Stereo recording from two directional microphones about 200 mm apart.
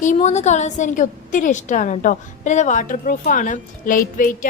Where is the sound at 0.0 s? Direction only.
35° left (ahead or behind).